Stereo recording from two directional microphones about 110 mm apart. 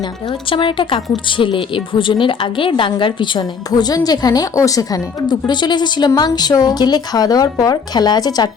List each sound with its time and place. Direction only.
0.3 s speech: 50° left (ahead or behind)